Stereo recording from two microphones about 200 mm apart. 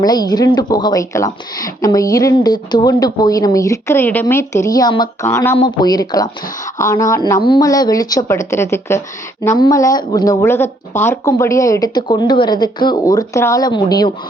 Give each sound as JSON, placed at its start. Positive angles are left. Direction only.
{"t": 0.0, "sound": "speech", "side_deg": 20}